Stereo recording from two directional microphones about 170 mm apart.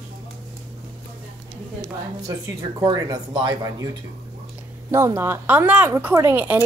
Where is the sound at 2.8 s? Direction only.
25° right (ahead or behind).